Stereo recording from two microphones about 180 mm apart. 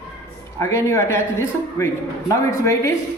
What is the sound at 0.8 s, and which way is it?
A man's voice, 15° left (ahead or behind).